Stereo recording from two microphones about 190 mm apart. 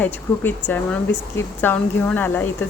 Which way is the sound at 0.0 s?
10° left (ahead or behind).